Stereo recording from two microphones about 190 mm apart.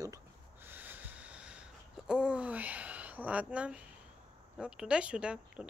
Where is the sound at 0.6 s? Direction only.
10° right (ahead or behind).